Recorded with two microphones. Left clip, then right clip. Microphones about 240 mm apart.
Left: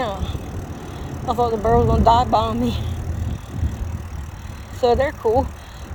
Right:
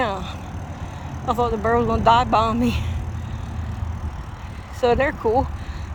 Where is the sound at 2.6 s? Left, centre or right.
Centre.